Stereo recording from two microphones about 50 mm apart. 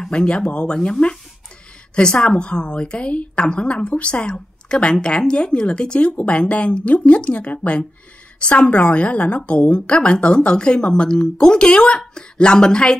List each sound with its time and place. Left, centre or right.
0.0 s a woman's voice: centre